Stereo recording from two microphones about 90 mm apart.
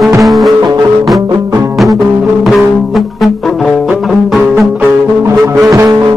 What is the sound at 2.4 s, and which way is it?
Music, centre (ahead or behind).